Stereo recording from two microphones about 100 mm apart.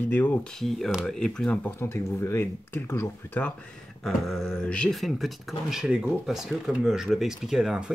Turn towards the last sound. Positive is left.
turn(degrees=-5)  # may be behind; listen again after turning